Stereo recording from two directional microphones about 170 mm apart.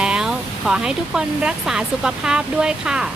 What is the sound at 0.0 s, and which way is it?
Speech, 5° right (ahead or behind).